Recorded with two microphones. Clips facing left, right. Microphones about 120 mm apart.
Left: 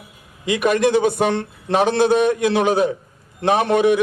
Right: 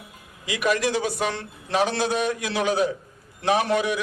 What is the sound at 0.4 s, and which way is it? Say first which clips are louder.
A man's voice: left 6 dB; 55° left (ahead or behind).